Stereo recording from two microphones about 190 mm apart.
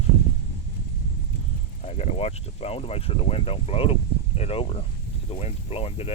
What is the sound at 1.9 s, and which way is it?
Speech, 30° left (ahead or behind).